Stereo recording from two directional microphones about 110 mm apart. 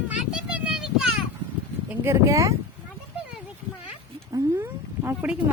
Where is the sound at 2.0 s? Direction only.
25° right (ahead or behind).